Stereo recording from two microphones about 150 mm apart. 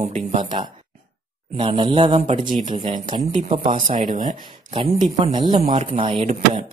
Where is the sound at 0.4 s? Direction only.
35° right (ahead or behind).